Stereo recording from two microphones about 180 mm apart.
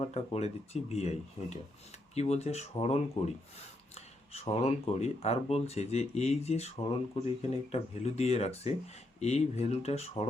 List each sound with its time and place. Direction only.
0.0 s speech: 35° left (ahead or behind)